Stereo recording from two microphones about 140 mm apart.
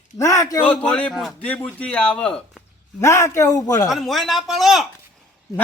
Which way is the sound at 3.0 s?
20° left (ahead or behind).